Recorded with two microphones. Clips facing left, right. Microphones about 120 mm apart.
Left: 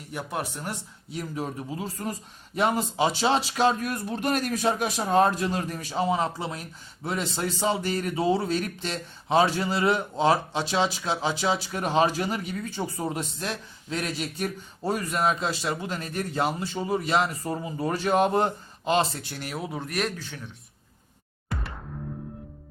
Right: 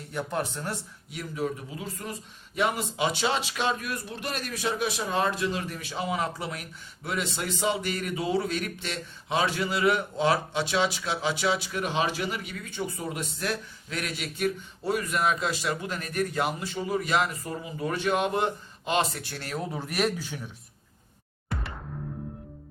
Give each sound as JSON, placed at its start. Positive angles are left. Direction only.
{"t": 0.1, "sound": "speech", "side_deg": 10}
{"t": 1.1, "sound": "speech", "side_deg": 35}
{"t": 19.2, "sound": "speech", "side_deg": 15}
{"t": 19.7, "sound": "speech", "side_deg": 0}
{"t": 21.5, "sound": "music", "side_deg": 0}